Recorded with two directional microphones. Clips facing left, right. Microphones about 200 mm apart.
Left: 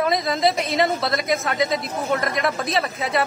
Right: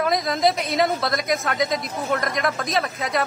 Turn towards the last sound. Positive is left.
turn(degrees=0)  # may be behind; listen again after turning